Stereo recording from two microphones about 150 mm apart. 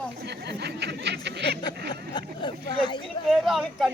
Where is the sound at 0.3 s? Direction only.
90° right.